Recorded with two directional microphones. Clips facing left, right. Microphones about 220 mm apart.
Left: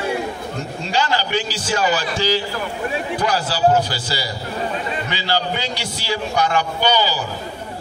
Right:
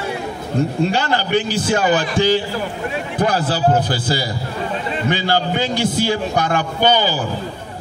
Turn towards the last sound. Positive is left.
turn(degrees=-50)  # may be behind; listen again after turning